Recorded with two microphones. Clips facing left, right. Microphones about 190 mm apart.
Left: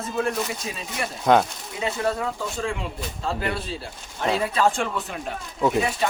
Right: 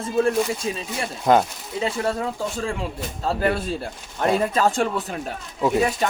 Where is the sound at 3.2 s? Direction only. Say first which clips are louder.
Right 5 dB; 45° right (ahead or behind).